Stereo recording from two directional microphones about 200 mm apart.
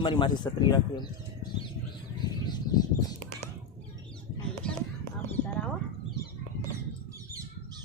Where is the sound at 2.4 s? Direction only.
20° left (ahead or behind).